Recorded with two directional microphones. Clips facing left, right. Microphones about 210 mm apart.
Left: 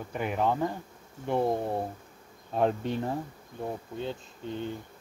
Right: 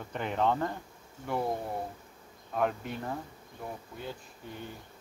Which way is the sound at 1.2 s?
25° left (ahead or behind).